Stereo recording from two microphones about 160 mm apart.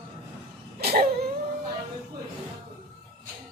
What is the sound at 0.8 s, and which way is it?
Throat clearing, 75° right (ahead or behind).